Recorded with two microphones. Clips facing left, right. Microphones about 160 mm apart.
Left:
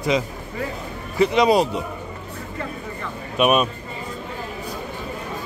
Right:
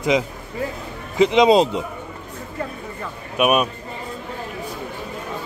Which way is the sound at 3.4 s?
10° right (ahead or behind).